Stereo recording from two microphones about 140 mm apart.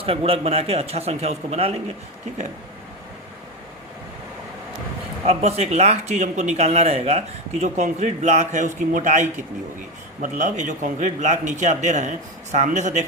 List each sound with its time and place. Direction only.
0.0 s speech: 45° right (ahead or behind)
5.2 s speech: 50° right (ahead or behind)